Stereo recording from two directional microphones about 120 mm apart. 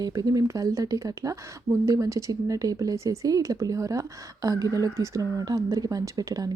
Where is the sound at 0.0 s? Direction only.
30° right (ahead or behind).